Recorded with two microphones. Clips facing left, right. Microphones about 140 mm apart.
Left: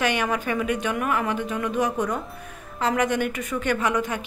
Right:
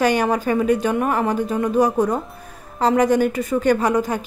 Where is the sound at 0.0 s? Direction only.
35° right (ahead or behind).